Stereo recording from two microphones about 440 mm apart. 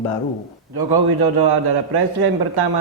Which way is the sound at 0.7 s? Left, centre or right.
Right.